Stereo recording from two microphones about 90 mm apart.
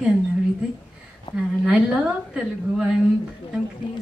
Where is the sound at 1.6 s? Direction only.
10° right (ahead or behind).